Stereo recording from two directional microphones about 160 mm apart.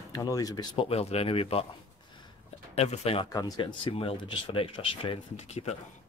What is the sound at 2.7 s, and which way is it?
Speech, 40° left (ahead or behind).